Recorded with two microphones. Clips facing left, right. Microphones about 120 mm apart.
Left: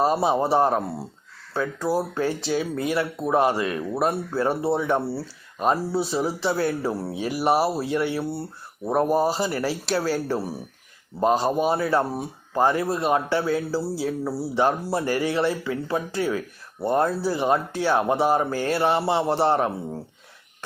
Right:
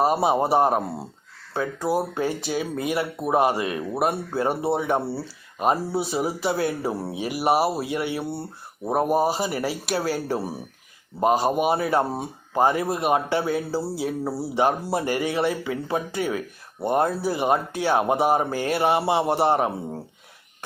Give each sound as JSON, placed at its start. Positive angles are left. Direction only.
{"t": 0.0, "sound": "speech", "side_deg": -15}
{"t": 5.1, "sound": "speech", "side_deg": -5}